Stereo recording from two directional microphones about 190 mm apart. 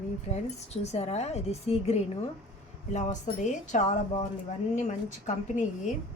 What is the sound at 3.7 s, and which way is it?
A woman's voice, 40° left (ahead or behind).